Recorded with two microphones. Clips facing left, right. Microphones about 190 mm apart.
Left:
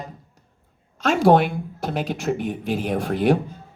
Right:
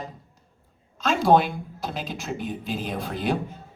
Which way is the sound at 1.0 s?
60° left (ahead or behind).